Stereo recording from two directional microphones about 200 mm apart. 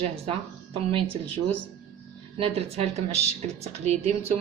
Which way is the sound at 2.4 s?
30° right (ahead or behind).